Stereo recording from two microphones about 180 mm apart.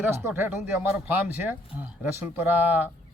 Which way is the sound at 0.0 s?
15° right (ahead or behind).